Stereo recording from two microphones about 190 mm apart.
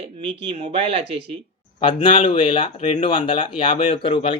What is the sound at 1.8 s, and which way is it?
Speech, 25° left (ahead or behind).